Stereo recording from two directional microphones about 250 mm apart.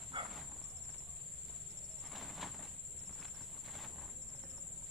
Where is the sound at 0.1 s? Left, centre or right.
Centre.